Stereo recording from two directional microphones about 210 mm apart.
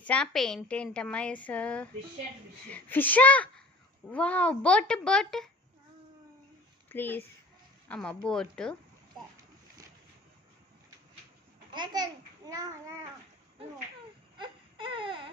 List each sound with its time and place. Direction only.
0.0 s a woman's voice: 5° left (ahead or behind)
6.8 s a woman's voice: 10° left (ahead or behind)
11.7 s a child's voice: 20° right (ahead or behind)
14.3 s baby cry: 25° right (ahead or behind)